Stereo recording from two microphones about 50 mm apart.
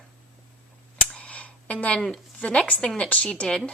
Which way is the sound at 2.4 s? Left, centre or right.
Centre.